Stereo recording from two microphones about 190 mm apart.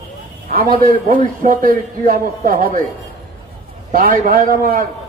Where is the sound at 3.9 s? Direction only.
50° right (ahead or behind).